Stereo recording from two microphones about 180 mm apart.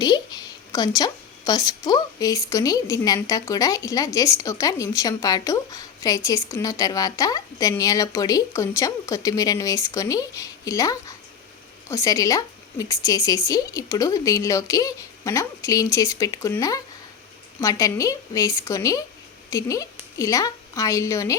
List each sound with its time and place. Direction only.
0.0 s a woman's voice: 20° left (ahead or behind)